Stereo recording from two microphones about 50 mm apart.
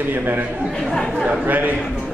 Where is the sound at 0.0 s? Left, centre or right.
Right.